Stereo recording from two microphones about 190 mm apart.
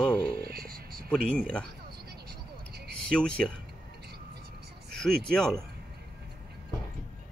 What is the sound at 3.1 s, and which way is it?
Speech, 5° left (ahead or behind).